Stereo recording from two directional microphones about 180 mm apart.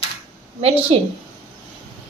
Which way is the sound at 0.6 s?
30° right (ahead or behind).